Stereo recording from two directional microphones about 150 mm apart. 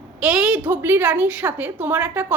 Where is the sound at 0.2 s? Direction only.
5° right (ahead or behind).